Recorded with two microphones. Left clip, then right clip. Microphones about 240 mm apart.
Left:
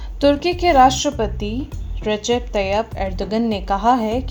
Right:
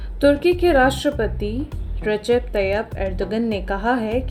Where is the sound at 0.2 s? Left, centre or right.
Centre.